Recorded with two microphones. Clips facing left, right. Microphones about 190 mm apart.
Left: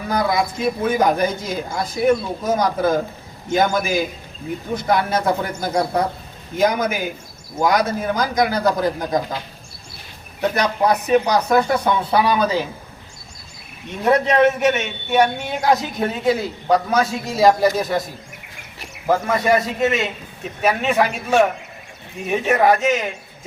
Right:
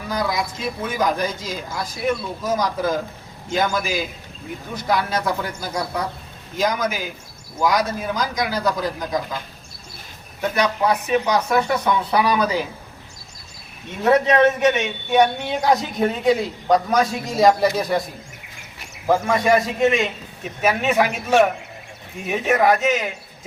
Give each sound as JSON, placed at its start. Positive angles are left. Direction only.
{"t": 0.1, "sound": "a man's voice", "side_deg": 55}
{"t": 10.5, "sound": "speech", "side_deg": 40}
{"t": 14.0, "sound": "a man's voice", "side_deg": 10}
{"t": 19.0, "sound": "a man's voice", "side_deg": 0}